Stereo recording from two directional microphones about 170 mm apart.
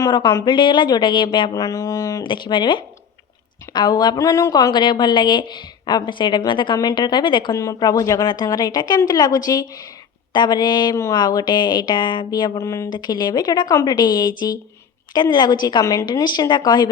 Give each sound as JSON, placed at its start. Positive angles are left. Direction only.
{"t": 0.0, "sound": "a woman's voice", "side_deg": 25}